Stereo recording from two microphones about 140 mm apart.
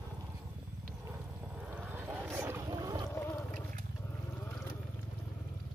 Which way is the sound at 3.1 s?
15° left (ahead or behind).